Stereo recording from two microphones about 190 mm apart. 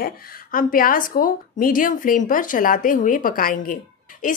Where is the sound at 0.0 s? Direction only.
45° left (ahead or behind).